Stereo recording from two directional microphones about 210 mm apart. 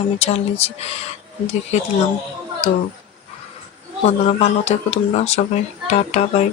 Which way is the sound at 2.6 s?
30° left (ahead or behind).